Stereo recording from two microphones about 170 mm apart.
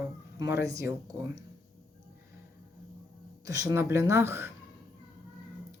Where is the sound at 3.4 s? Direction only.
20° right (ahead or behind).